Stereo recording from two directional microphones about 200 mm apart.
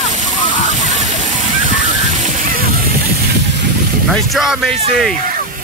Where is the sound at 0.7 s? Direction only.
35° right (ahead or behind).